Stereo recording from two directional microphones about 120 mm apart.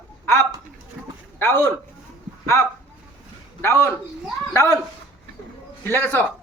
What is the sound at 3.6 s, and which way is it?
A man's voice, 20° left (ahead or behind).